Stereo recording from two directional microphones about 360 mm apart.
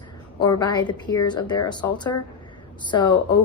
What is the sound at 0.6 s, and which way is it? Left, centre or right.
A woman's voice, centre.